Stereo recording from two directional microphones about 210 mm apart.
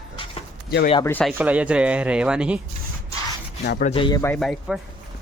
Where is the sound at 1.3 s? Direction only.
5° right (ahead or behind).